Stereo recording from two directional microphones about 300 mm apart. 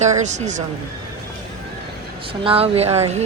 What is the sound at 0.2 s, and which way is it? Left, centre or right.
Speech, right.